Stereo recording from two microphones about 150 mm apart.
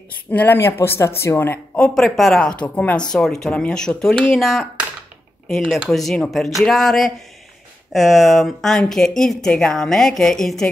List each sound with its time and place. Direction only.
0.3 s speech: 10° left (ahead or behind)
2.0 s speech: centre (ahead or behind)